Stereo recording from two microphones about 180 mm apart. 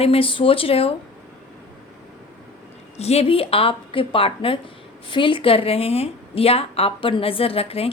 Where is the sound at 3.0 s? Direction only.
35° left (ahead or behind).